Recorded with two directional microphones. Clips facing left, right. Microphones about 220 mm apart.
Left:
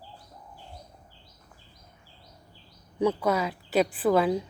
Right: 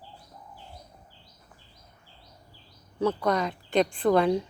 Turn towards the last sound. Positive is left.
turn(degrees=5)  # may be behind; listen again after turning